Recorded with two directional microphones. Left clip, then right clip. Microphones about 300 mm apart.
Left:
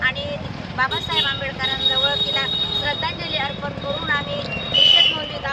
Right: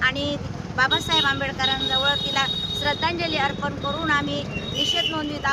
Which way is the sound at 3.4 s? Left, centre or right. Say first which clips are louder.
Right 1 dB; centre.